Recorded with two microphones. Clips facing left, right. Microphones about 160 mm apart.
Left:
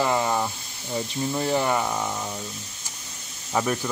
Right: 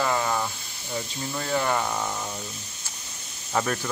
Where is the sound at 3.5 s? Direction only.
10° left (ahead or behind).